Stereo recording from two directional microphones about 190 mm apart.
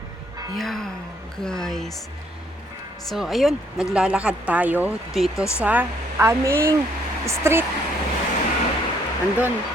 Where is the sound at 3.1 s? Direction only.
Centre (ahead or behind).